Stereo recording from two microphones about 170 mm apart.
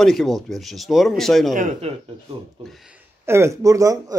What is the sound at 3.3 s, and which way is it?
Speech, 15° right (ahead or behind).